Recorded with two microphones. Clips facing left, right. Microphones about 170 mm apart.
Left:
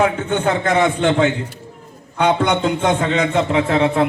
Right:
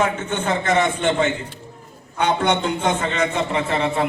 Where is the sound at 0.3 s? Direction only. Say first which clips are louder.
Left 3 dB; 60° left (ahead or behind).